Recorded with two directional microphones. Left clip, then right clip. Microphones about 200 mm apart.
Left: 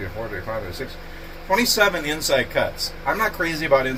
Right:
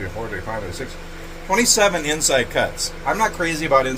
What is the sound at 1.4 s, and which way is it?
A man's voice, 35° right (ahead or behind).